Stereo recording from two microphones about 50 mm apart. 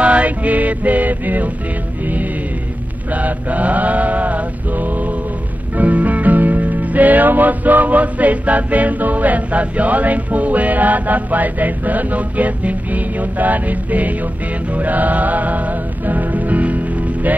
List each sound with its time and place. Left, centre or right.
0.0 s mantra: right
3.1 s mantra: right
5.8 s music: right